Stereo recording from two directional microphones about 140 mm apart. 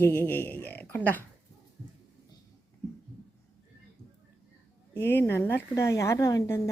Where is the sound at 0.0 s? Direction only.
15° left (ahead or behind).